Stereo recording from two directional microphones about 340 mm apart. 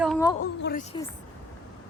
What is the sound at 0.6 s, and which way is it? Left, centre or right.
Speech, left.